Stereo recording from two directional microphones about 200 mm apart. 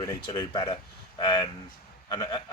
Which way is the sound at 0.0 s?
20° left (ahead or behind).